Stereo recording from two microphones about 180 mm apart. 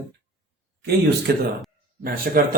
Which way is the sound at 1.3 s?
65° right (ahead or behind).